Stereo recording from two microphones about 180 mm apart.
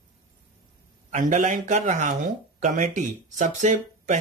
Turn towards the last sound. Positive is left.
turn(degrees=-40)  # may be behind; listen again after turning